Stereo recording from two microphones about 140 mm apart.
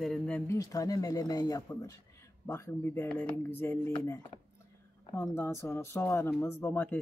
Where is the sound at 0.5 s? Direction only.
25° left (ahead or behind).